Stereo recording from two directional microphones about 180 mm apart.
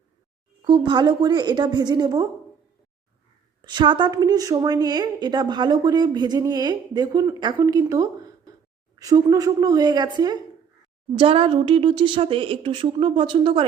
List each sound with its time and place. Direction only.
0.6 s a woman's voice: 25° right (ahead or behind)
3.6 s a woman's voice: 25° right (ahead or behind)